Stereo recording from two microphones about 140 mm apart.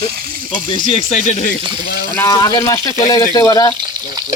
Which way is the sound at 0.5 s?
40° left (ahead or behind).